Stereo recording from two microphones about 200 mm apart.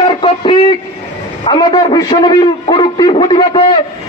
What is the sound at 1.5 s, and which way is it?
A man's voice, 25° left (ahead or behind).